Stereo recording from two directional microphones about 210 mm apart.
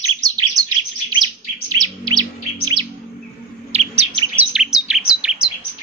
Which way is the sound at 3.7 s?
25° right (ahead or behind).